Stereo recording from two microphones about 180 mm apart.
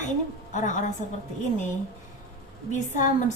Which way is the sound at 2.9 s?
45° left (ahead or behind).